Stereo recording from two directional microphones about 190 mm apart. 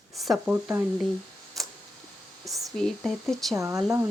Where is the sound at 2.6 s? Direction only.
Centre (ahead or behind).